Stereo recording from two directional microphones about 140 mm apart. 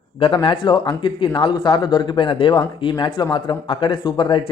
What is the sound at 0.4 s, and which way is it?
Speech, 35° left (ahead or behind).